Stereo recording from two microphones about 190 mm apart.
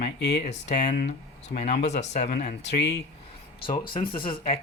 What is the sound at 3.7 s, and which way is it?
Speech, 25° left (ahead or behind).